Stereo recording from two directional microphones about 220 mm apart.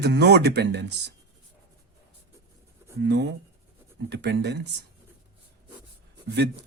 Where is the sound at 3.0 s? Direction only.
50° right (ahead or behind).